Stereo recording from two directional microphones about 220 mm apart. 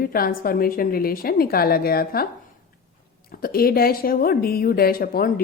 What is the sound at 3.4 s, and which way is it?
A woman's voice, 40° left (ahead or behind).